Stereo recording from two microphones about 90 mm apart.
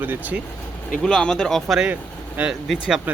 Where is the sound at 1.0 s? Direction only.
5° left (ahead or behind).